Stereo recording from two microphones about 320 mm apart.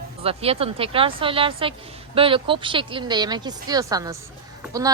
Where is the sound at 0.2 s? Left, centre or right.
Centre.